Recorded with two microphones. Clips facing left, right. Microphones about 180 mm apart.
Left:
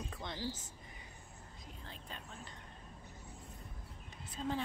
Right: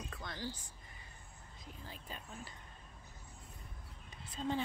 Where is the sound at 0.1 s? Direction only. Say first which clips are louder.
Left 2 dB; 20° left (ahead or behind).